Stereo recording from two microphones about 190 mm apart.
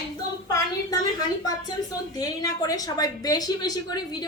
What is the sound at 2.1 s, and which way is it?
A woman's voice, 20° left (ahead or behind).